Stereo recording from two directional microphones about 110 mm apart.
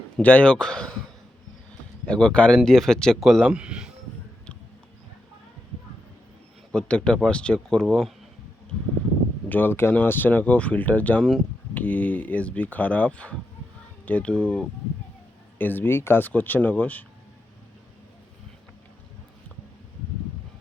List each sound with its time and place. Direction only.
0.2 s speech: 15° left (ahead or behind)
2.0 s speech: 10° left (ahead or behind); by 3.9 s 5° right (ahead or behind)
6.7 s speech: 10° left (ahead or behind)
9.5 s speech: 20° left (ahead or behind)